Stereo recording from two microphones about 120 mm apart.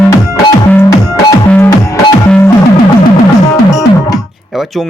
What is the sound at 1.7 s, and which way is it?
Music, 25° left (ahead or behind).